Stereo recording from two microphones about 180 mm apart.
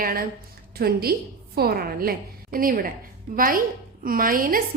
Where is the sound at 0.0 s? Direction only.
55° right (ahead or behind).